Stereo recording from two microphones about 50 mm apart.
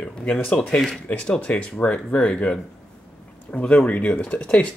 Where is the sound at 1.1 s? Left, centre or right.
Left.